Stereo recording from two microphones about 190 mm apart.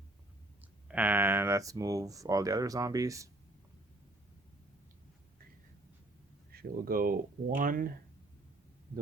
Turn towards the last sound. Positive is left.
turn(degrees=-45)  # may be behind; listen again after turning